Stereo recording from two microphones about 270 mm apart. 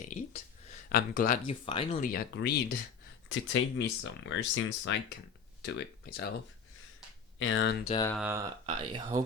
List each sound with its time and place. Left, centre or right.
0.1 s a sound: left
0.7 s speech: left
7.3 s speech: left
7.9 s speech: centre
8.1 s speech: centre
8.6 s speech: centre